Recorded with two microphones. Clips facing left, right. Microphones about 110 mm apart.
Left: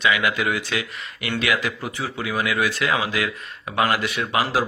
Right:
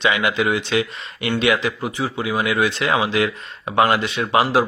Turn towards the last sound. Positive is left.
turn(degrees=-25)  # may be behind; listen again after turning